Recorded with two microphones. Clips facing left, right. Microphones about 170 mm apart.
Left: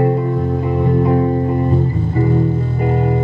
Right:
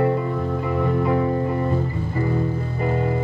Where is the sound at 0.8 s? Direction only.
35° left (ahead or behind).